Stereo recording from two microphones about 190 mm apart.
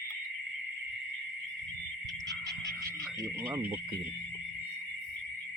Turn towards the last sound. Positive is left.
turn(degrees=-15)  # may be behind; listen again after turning